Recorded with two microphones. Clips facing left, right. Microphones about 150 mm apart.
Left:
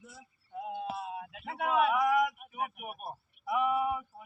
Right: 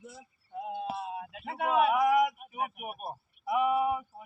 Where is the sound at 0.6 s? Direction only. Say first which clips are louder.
Right 2 dB; 5° left (ahead or behind).